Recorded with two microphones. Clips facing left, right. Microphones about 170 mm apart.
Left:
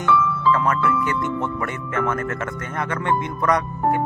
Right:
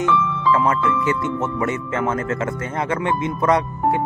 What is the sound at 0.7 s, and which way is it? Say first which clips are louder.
Speech: right 2 dB; 25° right (ahead or behind).